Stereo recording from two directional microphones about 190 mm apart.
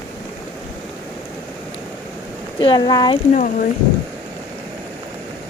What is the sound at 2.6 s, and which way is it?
Speech, 25° left (ahead or behind).